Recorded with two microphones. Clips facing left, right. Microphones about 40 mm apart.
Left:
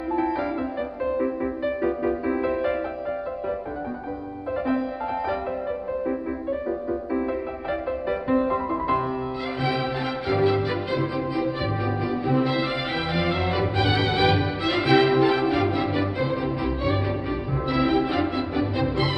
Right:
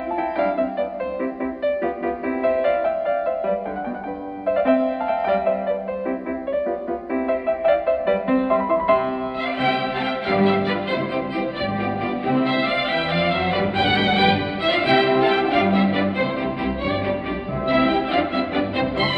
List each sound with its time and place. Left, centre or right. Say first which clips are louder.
0.1 s music: right 3 dB; right
3.1 s music: right 7 dB; right
10.2 s music: right 3 dB; right